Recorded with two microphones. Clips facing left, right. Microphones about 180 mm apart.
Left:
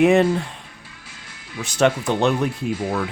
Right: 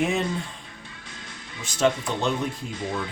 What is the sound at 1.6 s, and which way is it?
Speech, 70° left (ahead or behind).